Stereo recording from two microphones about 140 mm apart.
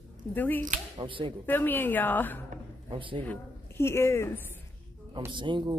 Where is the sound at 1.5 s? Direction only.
15° left (ahead or behind).